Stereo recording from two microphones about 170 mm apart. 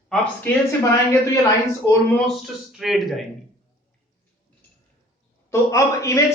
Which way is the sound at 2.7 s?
Centre (ahead or behind).